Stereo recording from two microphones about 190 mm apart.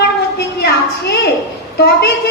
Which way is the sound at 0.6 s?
60° left (ahead or behind).